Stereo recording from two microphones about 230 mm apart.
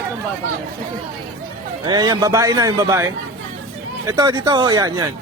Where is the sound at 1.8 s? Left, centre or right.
Centre.